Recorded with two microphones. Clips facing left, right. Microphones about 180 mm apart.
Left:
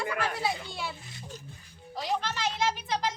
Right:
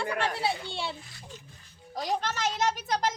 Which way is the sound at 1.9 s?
45° right (ahead or behind).